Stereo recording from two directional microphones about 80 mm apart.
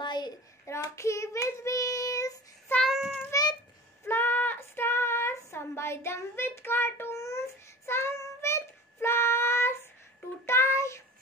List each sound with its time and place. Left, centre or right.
0.0 s hands: left
0.9 s child singing: left
2.8 s child singing: centre
3.3 s a sound: left
4.1 s child singing: left